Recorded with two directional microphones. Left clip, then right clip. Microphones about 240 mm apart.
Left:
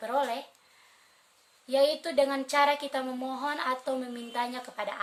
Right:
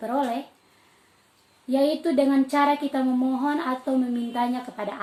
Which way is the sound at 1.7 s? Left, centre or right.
Left.